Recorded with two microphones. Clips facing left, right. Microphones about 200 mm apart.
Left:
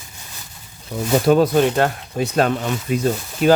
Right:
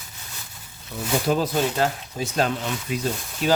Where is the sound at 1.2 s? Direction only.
60° left (ahead or behind).